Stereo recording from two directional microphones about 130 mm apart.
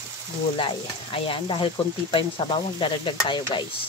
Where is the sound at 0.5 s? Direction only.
45° left (ahead or behind).